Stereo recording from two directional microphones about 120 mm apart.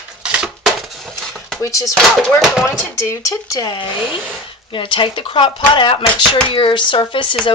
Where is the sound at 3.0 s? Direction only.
30° left (ahead or behind).